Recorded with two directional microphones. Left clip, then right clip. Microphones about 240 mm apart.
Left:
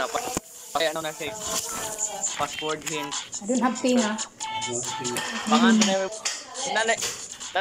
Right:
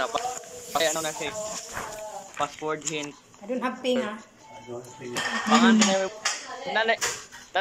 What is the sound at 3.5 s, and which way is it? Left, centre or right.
Speech, left.